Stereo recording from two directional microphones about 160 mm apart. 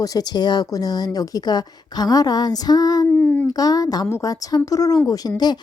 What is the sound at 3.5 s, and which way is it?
Speech, 25° left (ahead or behind).